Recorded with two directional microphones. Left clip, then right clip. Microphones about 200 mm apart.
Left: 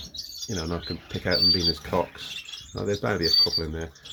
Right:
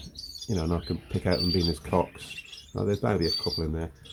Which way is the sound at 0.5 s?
15° right (ahead or behind).